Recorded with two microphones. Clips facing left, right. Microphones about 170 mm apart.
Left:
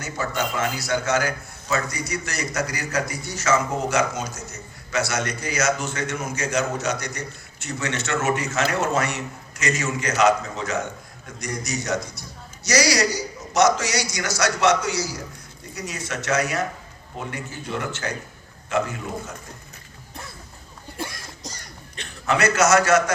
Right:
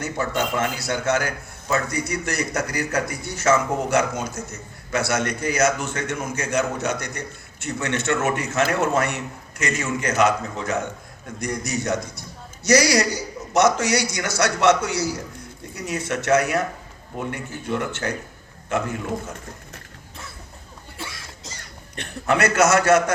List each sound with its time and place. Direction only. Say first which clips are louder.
0.0 s a man's voice: right 2 dB; 55° right (ahead or behind)
21.9 s a man's voice: right 2 dB; 55° right (ahead or behind)